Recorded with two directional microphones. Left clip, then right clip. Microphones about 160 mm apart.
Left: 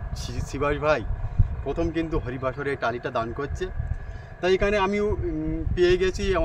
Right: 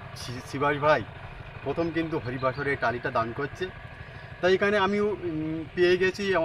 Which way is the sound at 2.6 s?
45° left (ahead or behind).